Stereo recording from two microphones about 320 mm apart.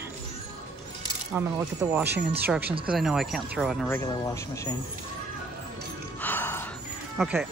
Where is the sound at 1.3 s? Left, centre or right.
Centre.